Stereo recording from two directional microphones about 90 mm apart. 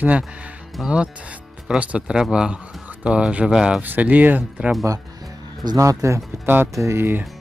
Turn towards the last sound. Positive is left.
turn(degrees=-25)  # may be behind; listen again after turning